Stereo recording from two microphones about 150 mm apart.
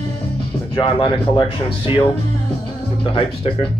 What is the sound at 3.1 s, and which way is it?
Speech, 35° left (ahead or behind).